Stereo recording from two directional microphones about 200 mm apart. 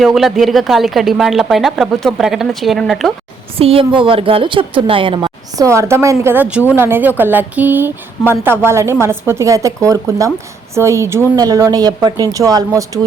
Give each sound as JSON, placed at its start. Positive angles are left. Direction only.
{"t": 0.0, "sound": "speech", "side_deg": 0}
{"t": 3.6, "sound": "a woman's voice", "side_deg": -30}